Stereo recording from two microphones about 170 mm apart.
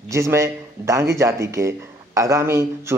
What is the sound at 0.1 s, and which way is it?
Speech, 15° right (ahead or behind).